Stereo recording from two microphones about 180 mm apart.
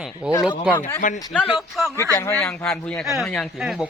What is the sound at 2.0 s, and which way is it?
Speech, 15° left (ahead or behind).